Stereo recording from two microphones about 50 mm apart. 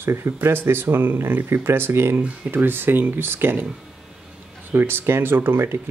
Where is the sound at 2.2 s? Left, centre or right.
Right.